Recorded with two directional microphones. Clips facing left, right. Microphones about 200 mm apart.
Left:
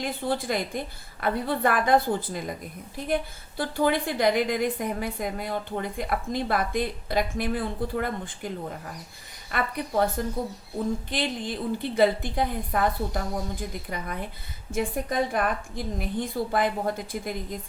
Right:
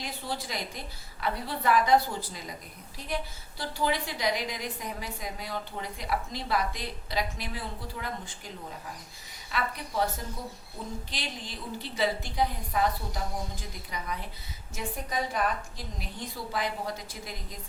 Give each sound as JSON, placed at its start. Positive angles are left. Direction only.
{"t": 0.0, "sound": "a woman's voice", "side_deg": 55}
{"t": 3.6, "sound": "a woman's voice", "side_deg": 55}
{"t": 11.1, "sound": "a woman's voice", "side_deg": 55}